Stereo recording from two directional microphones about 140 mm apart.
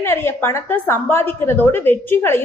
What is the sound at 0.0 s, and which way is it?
A woman's voice, 15° left (ahead or behind).